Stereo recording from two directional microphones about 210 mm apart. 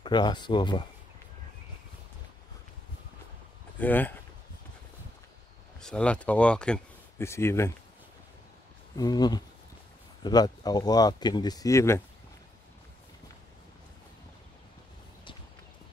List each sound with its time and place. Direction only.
0.0 s speech: 20° left (ahead or behind)
3.8 s speech: 10° left (ahead or behind)
5.8 s speech: 5° left (ahead or behind)
8.9 s speech: 20° left (ahead or behind)